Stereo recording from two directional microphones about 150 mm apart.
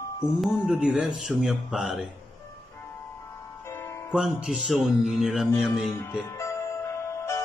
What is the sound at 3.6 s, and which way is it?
Music, 15° left (ahead or behind).